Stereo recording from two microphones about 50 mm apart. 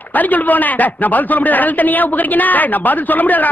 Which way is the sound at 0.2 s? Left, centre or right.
Left.